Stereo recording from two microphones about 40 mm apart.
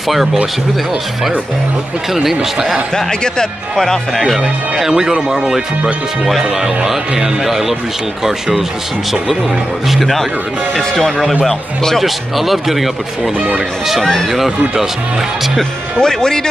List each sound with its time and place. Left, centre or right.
0.1 s speech: centre
2.2 s speech: centre
3.1 s speech: centre
4.9 s speech: centre
9.8 s speech: centre
12.0 s speech: centre
16.0 s speech: centre